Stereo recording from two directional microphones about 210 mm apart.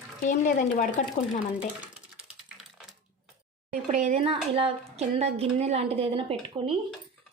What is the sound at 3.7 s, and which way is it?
A woman's voice, 35° right (ahead or behind).